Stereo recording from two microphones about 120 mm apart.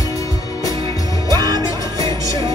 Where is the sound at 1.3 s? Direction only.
35° right (ahead or behind).